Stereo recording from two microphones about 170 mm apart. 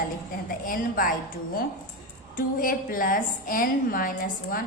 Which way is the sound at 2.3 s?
55° left (ahead or behind).